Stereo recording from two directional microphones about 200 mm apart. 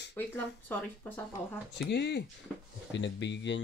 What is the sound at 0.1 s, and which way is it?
Speech, 10° left (ahead or behind).